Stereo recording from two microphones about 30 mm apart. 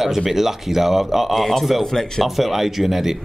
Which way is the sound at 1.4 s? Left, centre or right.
Centre.